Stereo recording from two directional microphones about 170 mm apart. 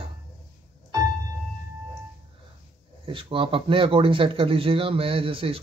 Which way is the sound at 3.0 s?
30° right (ahead or behind).